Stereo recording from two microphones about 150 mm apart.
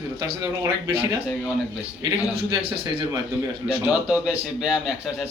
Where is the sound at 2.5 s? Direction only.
35° right (ahead or behind).